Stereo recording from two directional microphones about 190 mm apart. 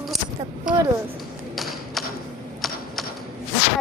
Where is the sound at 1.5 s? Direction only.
Centre (ahead or behind).